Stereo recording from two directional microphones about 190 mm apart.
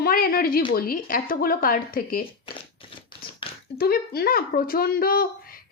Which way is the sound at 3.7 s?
55° left (ahead or behind).